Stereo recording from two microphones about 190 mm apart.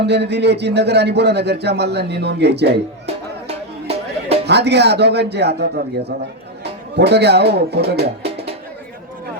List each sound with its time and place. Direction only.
0.0 s speech: 60° right (ahead or behind)
3.4 s music: 30° right (ahead or behind)
4.4 s speech: 60° right (ahead or behind)